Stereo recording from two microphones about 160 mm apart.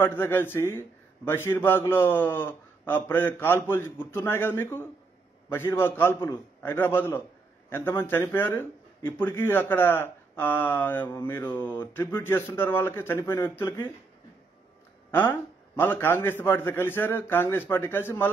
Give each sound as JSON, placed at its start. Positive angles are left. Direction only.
{"t": 0.0, "sound": "speech", "side_deg": 15}
{"t": 15.0, "sound": "speech", "side_deg": 15}